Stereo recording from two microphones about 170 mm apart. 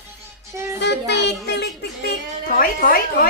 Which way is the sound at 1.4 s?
80° left.